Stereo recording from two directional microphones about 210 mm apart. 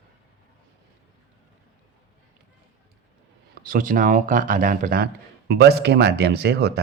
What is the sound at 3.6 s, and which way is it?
Speech, 40° right (ahead or behind).